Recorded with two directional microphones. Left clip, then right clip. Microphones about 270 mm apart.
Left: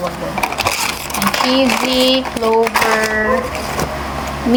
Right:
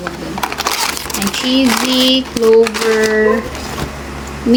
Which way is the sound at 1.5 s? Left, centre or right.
Centre.